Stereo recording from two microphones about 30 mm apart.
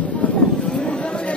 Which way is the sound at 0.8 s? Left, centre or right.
Left.